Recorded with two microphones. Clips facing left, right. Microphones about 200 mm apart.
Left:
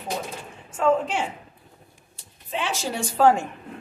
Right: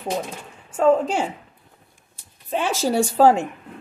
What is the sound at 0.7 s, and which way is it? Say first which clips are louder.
Speech: right 4 dB; 40° right (ahead or behind).